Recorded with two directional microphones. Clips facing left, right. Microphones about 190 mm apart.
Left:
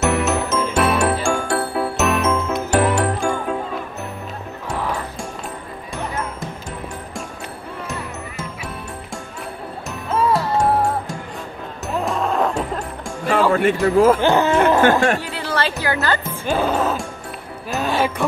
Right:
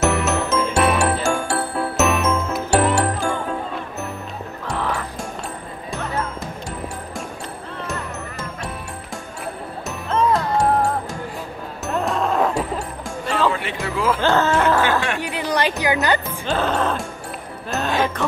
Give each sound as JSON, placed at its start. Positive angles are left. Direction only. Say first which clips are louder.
{"t": 0.0, "sound": "music", "louder": "left 1 dB", "side_deg": 0}
{"t": 9.8, "sound": "music", "louder": "even", "side_deg": 5}
{"t": 11.9, "sound": "music", "louder": "even", "side_deg": 0}
{"t": 13.5, "sound": "speech", "louder": "left 8 dB", "side_deg": 50}
{"t": 14.2, "sound": "speech", "louder": "left 2 dB", "side_deg": 15}
{"t": 14.8, "sound": "speech", "louder": "left 5 dB", "side_deg": 45}
{"t": 15.2, "sound": "music", "louder": "right 2 dB", "side_deg": -15}
{"t": 16.3, "sound": "music", "louder": "left 2 dB", "side_deg": 10}